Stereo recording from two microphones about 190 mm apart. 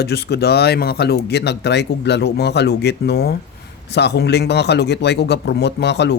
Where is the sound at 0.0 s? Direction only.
60° left (ahead or behind).